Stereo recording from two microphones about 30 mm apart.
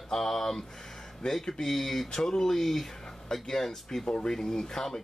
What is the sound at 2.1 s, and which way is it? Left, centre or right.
Speech, centre.